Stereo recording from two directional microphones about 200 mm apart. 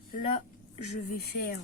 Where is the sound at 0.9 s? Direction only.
45° left (ahead or behind).